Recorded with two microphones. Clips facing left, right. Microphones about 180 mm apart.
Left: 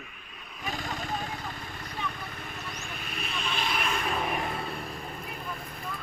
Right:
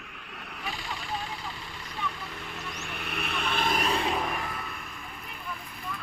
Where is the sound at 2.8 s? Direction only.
65° right (ahead or behind); by 4.0 s 35° right (ahead or behind).